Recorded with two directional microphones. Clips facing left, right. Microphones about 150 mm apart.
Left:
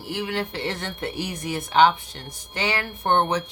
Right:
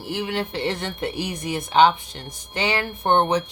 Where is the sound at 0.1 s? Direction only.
25° right (ahead or behind).